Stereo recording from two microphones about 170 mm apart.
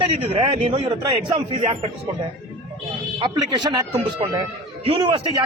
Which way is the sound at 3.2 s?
25° right (ahead or behind).